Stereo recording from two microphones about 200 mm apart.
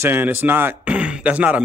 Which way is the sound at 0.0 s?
10° right (ahead or behind).